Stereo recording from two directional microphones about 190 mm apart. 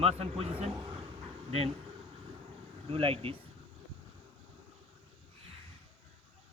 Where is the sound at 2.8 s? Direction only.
30° right (ahead or behind).